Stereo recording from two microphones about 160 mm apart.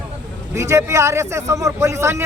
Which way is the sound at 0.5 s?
20° right (ahead or behind).